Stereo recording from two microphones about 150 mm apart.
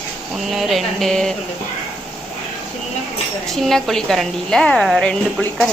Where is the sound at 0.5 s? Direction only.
Centre (ahead or behind).